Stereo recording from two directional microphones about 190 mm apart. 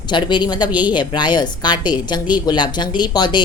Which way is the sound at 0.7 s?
10° right (ahead or behind).